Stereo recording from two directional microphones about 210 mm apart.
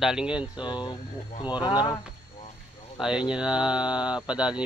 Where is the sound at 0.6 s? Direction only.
20° left (ahead or behind).